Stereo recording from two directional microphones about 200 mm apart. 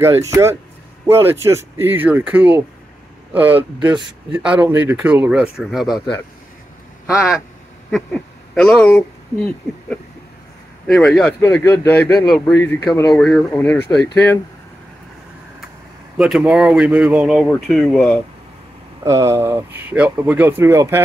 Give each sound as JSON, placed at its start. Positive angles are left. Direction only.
{"t": 0.0, "sound": "speech", "side_deg": -15}
{"t": 8.5, "sound": "speech", "side_deg": 5}
{"t": 12.8, "sound": "speech", "side_deg": 20}
{"t": 13.1, "sound": "speech", "side_deg": 0}
{"t": 16.2, "sound": "speech", "side_deg": -5}
{"t": 19.0, "sound": "speech", "side_deg": -15}